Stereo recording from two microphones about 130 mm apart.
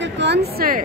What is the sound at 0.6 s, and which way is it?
Speech, 90° right.